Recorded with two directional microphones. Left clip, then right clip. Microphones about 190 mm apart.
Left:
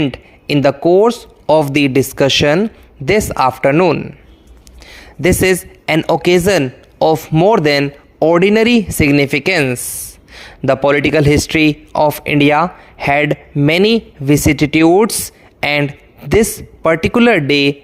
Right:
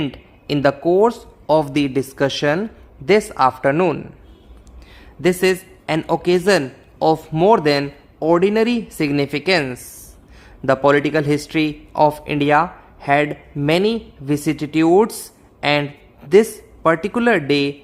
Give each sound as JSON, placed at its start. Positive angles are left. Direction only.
{"t": 0.1, "sound": "speech", "side_deg": 30}
{"t": 4.9, "sound": "a sound", "side_deg": 35}
{"t": 6.0, "sound": "speech", "side_deg": 35}
{"t": 7.3, "sound": "speech", "side_deg": 25}
{"t": 7.5, "sound": "speech", "side_deg": 40}